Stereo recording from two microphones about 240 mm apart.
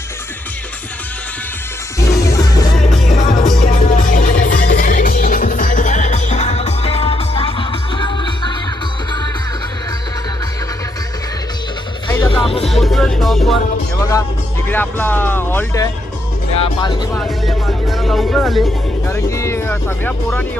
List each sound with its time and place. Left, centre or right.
2.0 s music: centre
3.1 s music: left
12.0 s music: centre
14.7 s speech: centre
17.2 s speech: centre
19.0 s speech: centre